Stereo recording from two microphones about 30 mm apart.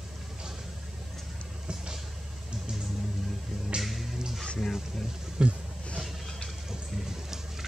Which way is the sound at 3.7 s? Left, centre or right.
Right.